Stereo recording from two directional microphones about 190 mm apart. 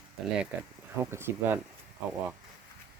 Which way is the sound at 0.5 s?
10° right (ahead or behind).